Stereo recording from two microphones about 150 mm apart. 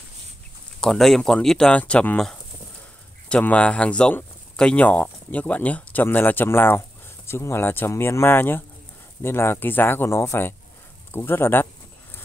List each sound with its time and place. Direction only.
0.7 s speech: centre (ahead or behind)